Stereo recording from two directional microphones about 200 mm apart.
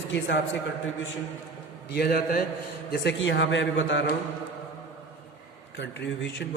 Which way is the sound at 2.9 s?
60° left (ahead or behind).